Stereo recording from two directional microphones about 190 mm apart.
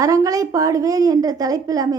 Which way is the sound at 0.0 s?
15° right (ahead or behind).